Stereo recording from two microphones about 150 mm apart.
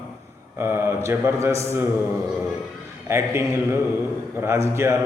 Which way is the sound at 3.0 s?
15° right (ahead or behind).